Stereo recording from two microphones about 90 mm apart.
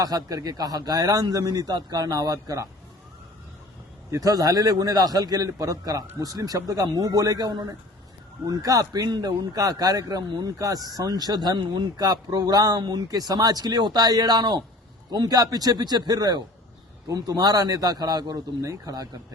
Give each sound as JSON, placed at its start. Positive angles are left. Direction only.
{"t": 0.0, "sound": "speech", "side_deg": -45}
{"t": 4.1, "sound": "speech", "side_deg": -45}